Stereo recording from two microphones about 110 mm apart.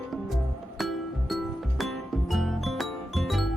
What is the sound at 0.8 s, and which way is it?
Music, centre (ahead or behind).